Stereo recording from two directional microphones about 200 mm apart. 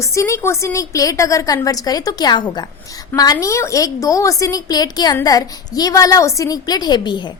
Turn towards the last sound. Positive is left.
turn(degrees=20)  # may be behind; listen again after turning